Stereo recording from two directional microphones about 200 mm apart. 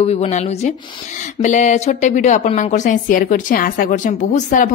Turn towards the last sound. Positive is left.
turn(degrees=40)  # may be behind; listen again after turning